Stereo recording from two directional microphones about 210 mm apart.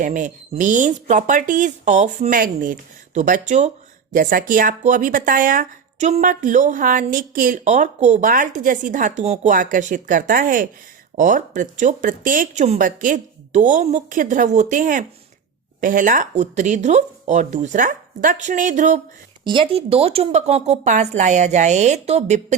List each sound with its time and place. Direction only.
0.0 s speech: 35° right (ahead or behind)
19.5 s speech: 25° right (ahead or behind)